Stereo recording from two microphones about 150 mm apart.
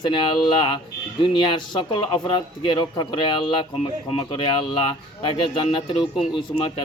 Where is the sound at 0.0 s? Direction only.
30° left (ahead or behind).